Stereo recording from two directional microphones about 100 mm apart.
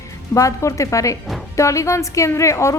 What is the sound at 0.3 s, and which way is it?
A woman's voice, 30° left (ahead or behind).